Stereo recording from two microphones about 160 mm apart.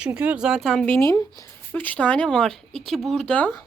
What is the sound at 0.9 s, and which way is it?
Speech, 20° left (ahead or behind).